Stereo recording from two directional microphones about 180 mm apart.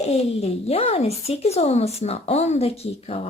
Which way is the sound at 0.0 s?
35° left (ahead or behind).